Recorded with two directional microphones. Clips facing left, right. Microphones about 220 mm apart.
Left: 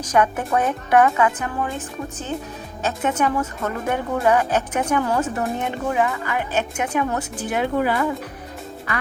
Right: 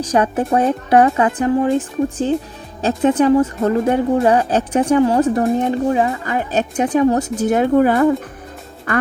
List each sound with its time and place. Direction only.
0.1 s speech: 30° right (ahead or behind)
2.8 s speech: 35° right (ahead or behind)